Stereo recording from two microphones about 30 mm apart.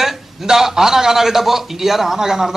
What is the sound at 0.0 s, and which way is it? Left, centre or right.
A man's voice, centre.